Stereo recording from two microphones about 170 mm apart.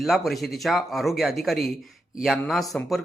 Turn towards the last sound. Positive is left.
turn(degrees=0)  # may be behind; listen again after turning